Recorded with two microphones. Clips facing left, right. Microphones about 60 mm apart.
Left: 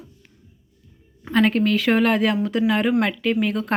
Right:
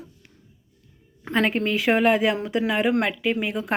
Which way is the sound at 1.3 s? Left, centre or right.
Centre.